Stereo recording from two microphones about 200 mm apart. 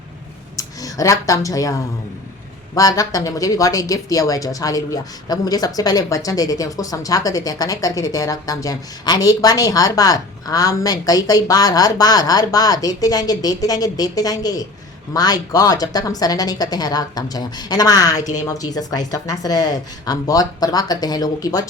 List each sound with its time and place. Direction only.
0.5 s speech: 15° left (ahead or behind)
2.7 s a woman's voice: 15° left (ahead or behind)